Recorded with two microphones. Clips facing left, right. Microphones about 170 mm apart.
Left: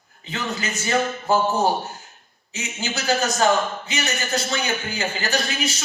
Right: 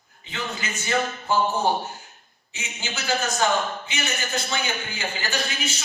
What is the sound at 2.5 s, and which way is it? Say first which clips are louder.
Speech: left 6 dB; 40° left (ahead or behind).